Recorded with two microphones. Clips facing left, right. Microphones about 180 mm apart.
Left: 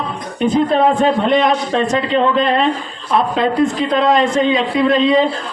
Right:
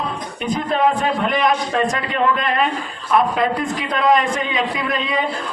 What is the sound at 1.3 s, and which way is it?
A man's voice, 25° left (ahead or behind).